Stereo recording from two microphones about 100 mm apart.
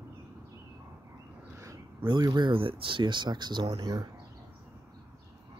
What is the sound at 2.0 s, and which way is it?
Speech, 45° right (ahead or behind).